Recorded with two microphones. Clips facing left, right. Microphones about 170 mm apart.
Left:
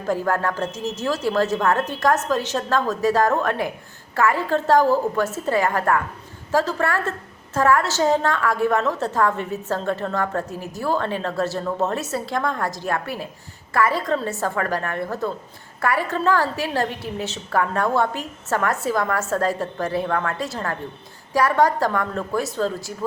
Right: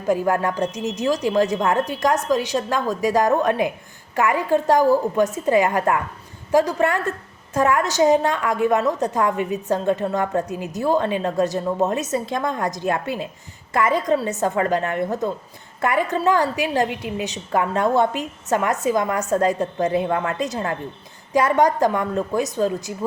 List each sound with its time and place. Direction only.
0.1 s a woman's voice: 15° right (ahead or behind)